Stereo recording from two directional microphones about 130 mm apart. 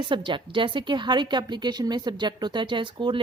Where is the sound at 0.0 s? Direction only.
40° right (ahead or behind).